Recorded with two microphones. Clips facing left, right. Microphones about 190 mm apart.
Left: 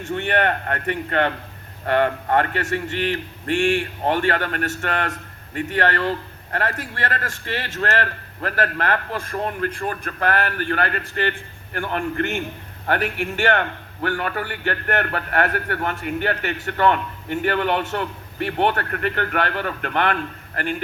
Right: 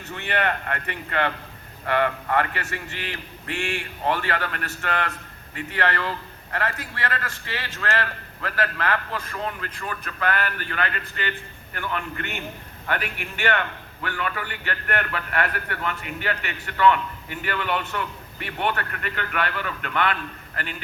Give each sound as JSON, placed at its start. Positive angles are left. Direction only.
{"t": 0.0, "sound": "a man's voice", "side_deg": 50}
{"t": 4.0, "sound": "a man's voice", "side_deg": 45}